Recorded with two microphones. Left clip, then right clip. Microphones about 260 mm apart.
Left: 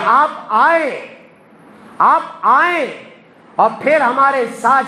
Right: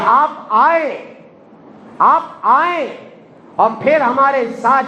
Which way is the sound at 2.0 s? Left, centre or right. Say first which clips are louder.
Even; left.